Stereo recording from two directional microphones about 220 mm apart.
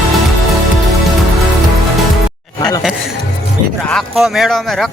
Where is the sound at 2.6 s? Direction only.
15° left (ahead or behind).